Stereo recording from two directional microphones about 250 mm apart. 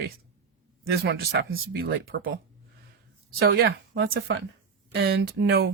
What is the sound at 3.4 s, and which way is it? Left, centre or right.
Speech, right.